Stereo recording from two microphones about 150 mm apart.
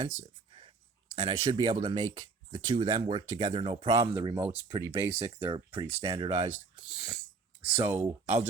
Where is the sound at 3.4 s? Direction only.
40° right (ahead or behind).